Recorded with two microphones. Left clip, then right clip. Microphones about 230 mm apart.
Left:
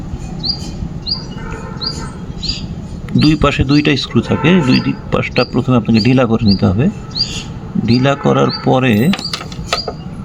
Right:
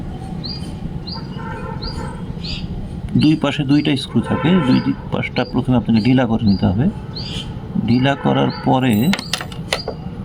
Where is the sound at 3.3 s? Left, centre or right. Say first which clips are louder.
Left 4 dB; left.